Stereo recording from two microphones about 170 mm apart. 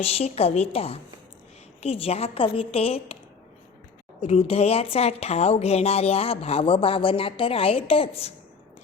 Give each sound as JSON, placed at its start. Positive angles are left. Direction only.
{"t": 0.0, "sound": "a woman's voice", "side_deg": 35}
{"t": 4.2, "sound": "a woman's voice", "side_deg": 35}